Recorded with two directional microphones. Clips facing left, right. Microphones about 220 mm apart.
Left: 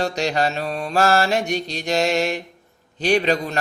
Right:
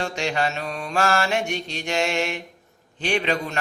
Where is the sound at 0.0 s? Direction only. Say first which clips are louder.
Left 4 dB; 40° left (ahead or behind).